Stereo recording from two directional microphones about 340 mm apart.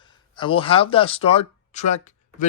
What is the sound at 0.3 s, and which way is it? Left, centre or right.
A man's voice, centre.